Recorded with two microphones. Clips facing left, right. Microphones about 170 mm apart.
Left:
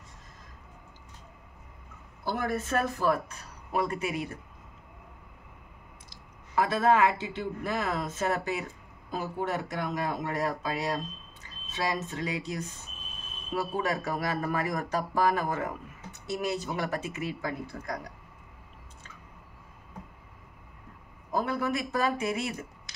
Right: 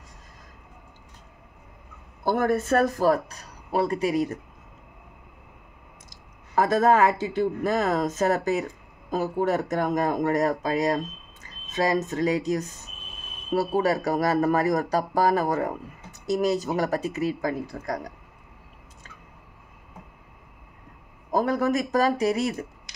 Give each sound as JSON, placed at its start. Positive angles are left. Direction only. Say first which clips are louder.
{"t": 2.2, "sound": "speech", "louder": "right 8 dB", "side_deg": -50}
{"t": 6.5, "sound": "speech", "louder": "right 4 dB", "side_deg": -40}
{"t": 21.3, "sound": "speech", "louder": "right 6 dB", "side_deg": -40}